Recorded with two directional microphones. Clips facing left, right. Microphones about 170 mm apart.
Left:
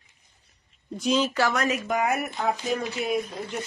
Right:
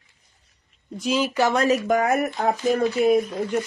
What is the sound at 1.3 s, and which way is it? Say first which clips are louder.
Speech: right 4 dB; 20° right (ahead or behind).